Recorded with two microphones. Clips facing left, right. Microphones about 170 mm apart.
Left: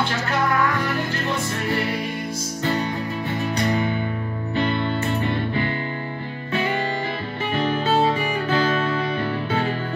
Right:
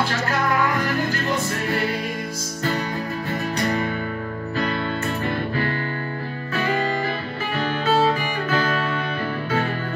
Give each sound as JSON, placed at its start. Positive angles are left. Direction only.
{"t": 7.5, "sound": "music", "side_deg": 25}